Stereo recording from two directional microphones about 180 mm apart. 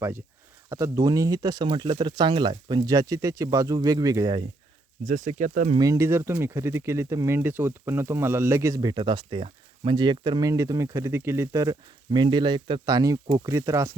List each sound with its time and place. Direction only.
0.7 s speech: 20° right (ahead or behind)
5.0 s speech: 40° right (ahead or behind)
5.7 s speech: 20° right (ahead or behind)